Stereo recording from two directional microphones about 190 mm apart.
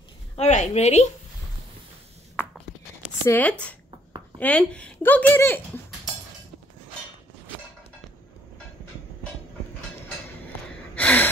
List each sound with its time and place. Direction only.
0.4 s a woman's voice: 35° left (ahead or behind)
2.4 s writing: 10° left (ahead or behind)
3.3 s speech: 10° left (ahead or behind)
11.0 s gasp: 5° left (ahead or behind)